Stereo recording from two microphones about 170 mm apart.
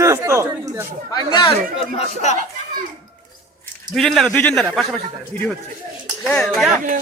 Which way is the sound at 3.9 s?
Centre (ahead or behind).